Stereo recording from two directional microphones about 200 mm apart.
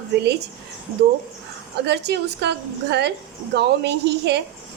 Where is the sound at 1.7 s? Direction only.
55° right (ahead or behind).